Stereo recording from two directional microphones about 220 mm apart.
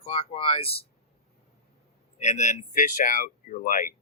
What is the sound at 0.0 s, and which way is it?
Speech, 25° left (ahead or behind).